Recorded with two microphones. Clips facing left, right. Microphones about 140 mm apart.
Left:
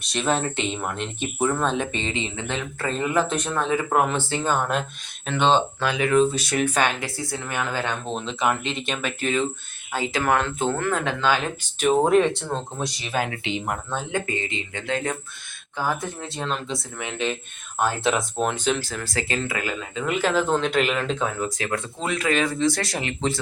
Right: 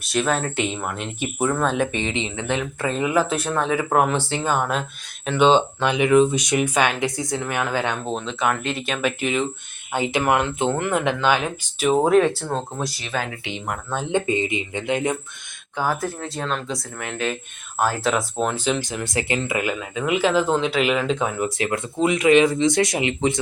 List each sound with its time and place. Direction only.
0.0 s speech: centre (ahead or behind)
8.1 s speech: centre (ahead or behind)
8.9 s speech: 10° right (ahead or behind)
13.9 s speech: 25° right (ahead or behind)
16.2 s speech: centre (ahead or behind)
18.5 s speech: 10° right (ahead or behind)
18.9 s speech: 20° right (ahead or behind)